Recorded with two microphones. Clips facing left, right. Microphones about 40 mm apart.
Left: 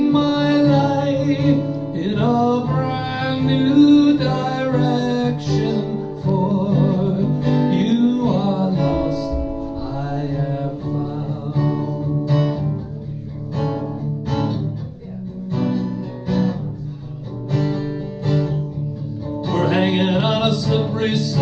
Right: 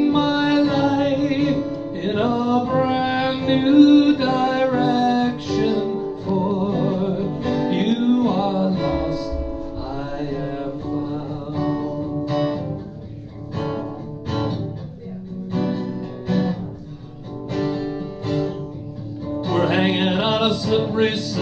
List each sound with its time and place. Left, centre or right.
0.0 s music: centre
14.2 s music: centre
15.5 s guitar: centre
17.5 s music: centre
19.5 s music: centre
20.9 s music: centre